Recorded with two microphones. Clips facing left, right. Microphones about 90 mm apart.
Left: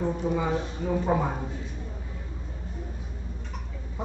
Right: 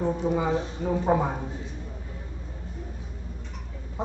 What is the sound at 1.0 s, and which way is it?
Speech, 20° right (ahead or behind).